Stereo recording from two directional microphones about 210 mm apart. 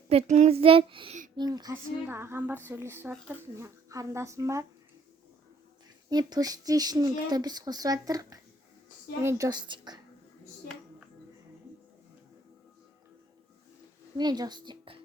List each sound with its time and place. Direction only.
0.1 s a woman's voice: 30° right (ahead or behind); by 4.6 s 15° right (ahead or behind)
6.1 s speech: 20° right (ahead or behind)
14.2 s speech: 20° right (ahead or behind)